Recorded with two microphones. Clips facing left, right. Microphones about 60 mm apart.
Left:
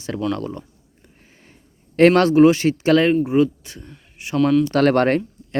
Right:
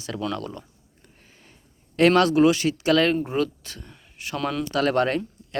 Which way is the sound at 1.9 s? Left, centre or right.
Left.